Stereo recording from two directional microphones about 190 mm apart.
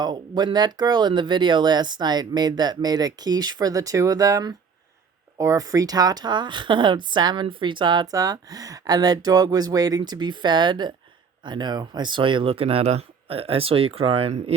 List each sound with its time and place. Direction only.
0.0 s speech: 25° right (ahead or behind)